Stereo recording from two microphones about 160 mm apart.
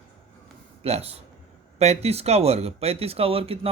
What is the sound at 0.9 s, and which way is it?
Speech, 40° right (ahead or behind).